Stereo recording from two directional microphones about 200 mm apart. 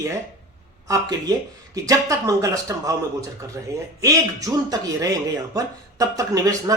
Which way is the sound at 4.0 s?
15° right (ahead or behind).